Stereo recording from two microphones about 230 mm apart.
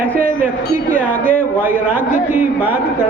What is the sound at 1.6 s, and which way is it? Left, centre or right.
A man's voice, centre.